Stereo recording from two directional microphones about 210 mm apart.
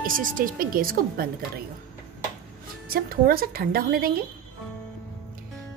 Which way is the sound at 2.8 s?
45° right (ahead or behind).